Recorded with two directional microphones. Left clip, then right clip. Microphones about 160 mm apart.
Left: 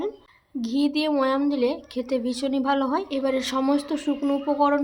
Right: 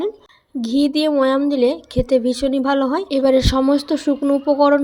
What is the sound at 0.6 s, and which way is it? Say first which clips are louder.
A woman's voice: right 7 dB; 35° right (ahead or behind).